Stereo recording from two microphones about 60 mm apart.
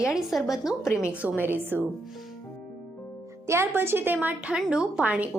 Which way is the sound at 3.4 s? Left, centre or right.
Right.